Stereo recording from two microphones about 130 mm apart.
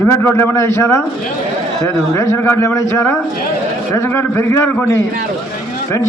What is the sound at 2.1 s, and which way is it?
A man's voice, 20° left (ahead or behind).